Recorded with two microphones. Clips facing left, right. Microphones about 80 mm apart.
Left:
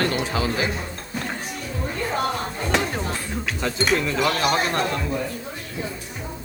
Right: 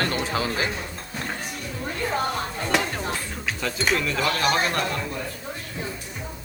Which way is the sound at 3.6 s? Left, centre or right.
Left.